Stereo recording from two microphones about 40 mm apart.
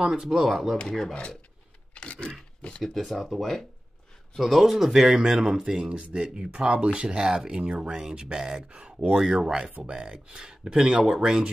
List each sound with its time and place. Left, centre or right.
0.0 s speech: centre
0.5 s speech: centre
0.8 s speech: centre
2.0 s a sound: left
2.8 s speech: centre; by 9.2 s right
9.2 s speech: centre